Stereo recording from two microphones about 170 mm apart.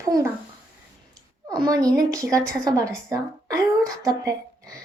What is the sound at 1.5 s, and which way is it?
A woman's voice, 20° right (ahead or behind).